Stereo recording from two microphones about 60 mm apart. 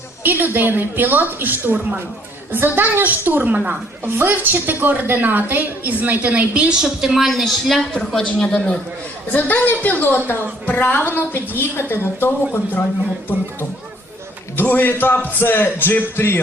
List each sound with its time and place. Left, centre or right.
0.2 s a woman's voice: right
6.8 s a woman's voice: centre
7.9 s speech: centre
9.3 s speech: left
14.5 s speech: left